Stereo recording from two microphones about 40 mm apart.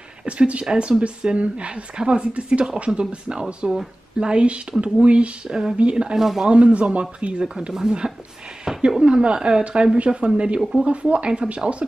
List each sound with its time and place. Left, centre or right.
0.3 s speech: right
6.1 s speech: centre
6.5 s speech: right
8.7 s a sound: centre
9.0 s speech: right
10.6 s speech: centre
10.9 s speech: right